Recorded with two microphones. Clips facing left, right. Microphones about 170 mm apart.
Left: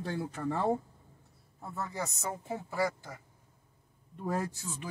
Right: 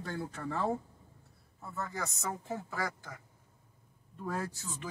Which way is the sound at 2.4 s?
15° left (ahead or behind).